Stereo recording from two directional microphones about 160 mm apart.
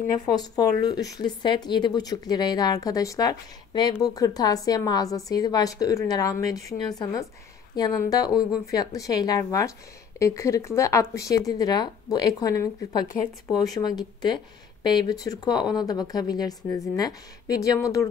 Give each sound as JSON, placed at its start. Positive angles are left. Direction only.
{"t": 0.8, "sound": "a woman's voice", "side_deg": 20}